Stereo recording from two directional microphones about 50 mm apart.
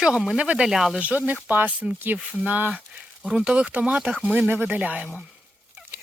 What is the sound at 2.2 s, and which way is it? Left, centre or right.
Speech, right.